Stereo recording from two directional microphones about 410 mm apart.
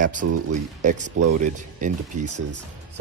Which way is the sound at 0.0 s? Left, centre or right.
Centre.